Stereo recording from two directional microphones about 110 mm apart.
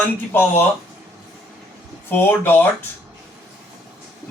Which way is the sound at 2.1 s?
20° left (ahead or behind).